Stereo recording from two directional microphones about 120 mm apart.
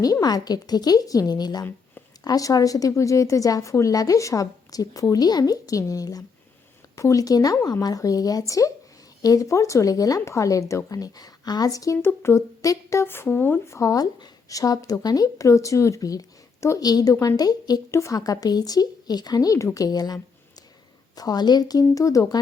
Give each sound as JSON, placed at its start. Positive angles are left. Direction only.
{"t": 0.0, "sound": "speech", "side_deg": 30}
{"t": 21.2, "sound": "speech", "side_deg": 35}